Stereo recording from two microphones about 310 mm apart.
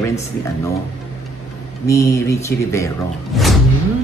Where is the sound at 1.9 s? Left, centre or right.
Centre.